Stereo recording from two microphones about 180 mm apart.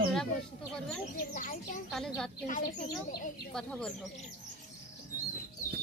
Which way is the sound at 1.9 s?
5° left (ahead or behind).